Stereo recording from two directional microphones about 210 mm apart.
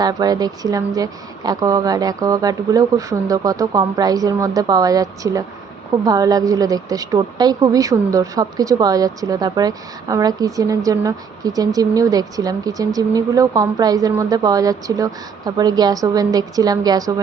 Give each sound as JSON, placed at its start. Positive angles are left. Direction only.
{"t": 0.0, "sound": "speech", "side_deg": -20}